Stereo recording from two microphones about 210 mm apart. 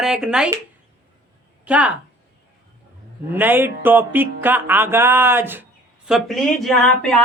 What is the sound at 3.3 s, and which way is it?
Music, 10° right (ahead or behind).